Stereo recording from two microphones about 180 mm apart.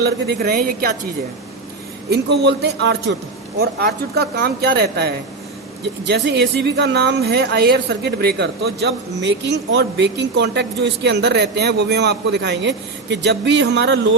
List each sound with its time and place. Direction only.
0.0 s speech: 65° right (ahead or behind)
2.0 s speech: 70° right (ahead or behind)
3.6 s speech: 60° right (ahead or behind)